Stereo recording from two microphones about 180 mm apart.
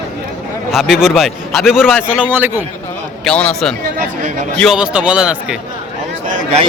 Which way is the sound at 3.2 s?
5° left (ahead or behind).